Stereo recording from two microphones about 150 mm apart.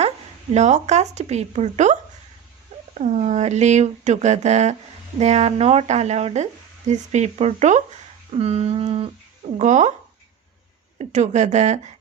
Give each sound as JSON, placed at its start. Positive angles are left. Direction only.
{"t": 0.5, "sound": "speech", "side_deg": -50}
{"t": 3.0, "sound": "speech", "side_deg": -50}
{"t": 8.3, "sound": "a sound", "side_deg": -45}
{"t": 9.6, "sound": "speech", "side_deg": -55}
{"t": 10.9, "sound": "speech", "side_deg": -50}